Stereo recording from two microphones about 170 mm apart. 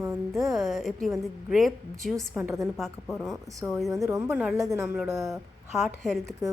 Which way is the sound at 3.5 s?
10° right (ahead or behind).